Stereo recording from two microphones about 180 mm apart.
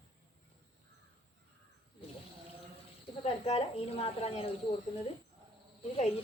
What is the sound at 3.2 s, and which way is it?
A woman's voice, 35° left (ahead or behind).